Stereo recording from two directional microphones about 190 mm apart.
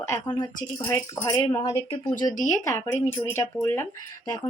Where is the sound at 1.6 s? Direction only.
30° left (ahead or behind).